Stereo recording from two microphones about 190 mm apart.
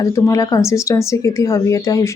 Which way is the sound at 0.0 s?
15° left (ahead or behind).